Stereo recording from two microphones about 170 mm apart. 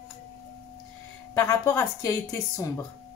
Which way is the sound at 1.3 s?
15° left (ahead or behind).